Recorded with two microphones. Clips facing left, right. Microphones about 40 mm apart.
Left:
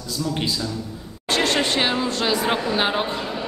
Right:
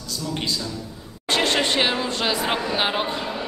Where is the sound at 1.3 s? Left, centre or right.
Centre.